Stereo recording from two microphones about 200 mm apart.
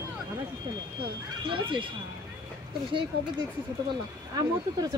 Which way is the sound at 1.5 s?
25° right (ahead or behind).